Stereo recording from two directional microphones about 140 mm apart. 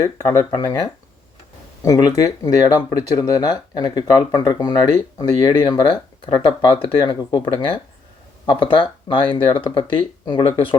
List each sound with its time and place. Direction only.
0.0 s speech: 25° left (ahead or behind)